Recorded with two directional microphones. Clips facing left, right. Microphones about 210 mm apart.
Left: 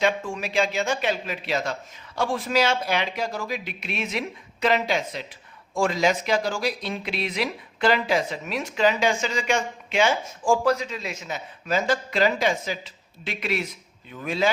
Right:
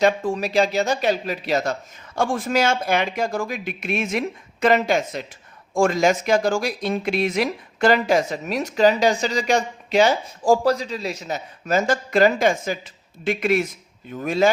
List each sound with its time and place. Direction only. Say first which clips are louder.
0.0 s speech: right 5 dB; 40° right (ahead or behind)